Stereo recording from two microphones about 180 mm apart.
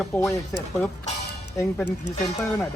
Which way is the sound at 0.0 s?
10° left (ahead or behind).